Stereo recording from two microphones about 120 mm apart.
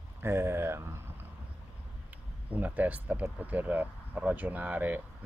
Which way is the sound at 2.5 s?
15° right (ahead or behind).